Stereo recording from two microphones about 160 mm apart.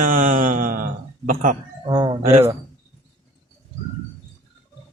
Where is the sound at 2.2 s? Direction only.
40° right (ahead or behind).